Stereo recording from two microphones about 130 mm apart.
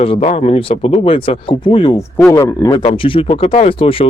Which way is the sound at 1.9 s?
25° left (ahead or behind).